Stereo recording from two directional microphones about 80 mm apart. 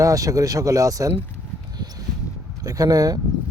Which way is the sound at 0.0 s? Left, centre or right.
Right.